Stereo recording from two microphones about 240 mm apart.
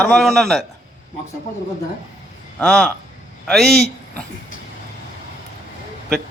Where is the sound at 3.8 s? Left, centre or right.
Left.